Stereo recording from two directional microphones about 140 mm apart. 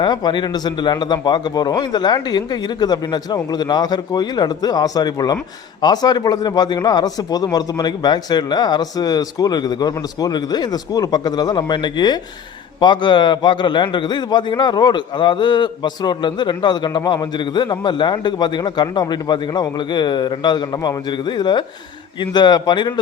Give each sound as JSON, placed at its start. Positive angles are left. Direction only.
{"t": 0.0, "sound": "a man's voice", "side_deg": 30}